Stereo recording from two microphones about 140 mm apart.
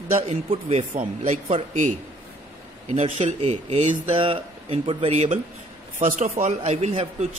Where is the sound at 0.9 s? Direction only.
60° right (ahead or behind).